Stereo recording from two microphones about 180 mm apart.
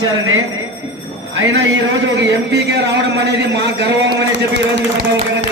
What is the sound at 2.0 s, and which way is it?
A man's voice, 85° right.